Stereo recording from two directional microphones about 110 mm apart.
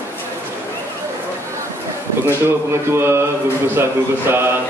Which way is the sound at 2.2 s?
20° right (ahead or behind).